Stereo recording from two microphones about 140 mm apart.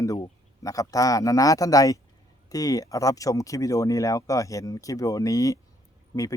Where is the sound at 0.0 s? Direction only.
25° left (ahead or behind).